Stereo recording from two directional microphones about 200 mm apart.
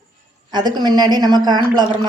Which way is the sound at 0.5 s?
20° right (ahead or behind).